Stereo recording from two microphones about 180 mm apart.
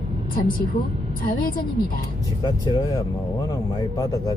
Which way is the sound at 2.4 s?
20° left (ahead or behind).